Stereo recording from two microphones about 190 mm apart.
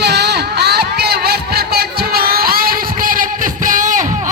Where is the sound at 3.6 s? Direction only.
45° right (ahead or behind).